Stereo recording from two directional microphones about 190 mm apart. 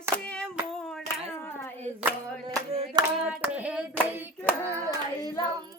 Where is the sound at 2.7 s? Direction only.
25° right (ahead or behind).